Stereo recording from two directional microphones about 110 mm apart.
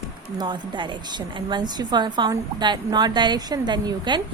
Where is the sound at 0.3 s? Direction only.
45° right (ahead or behind).